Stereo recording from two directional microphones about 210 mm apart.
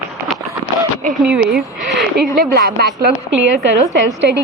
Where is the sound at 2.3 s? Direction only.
50° right (ahead or behind).